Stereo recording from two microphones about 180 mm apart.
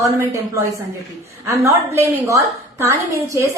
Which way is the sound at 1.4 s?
15° right (ahead or behind).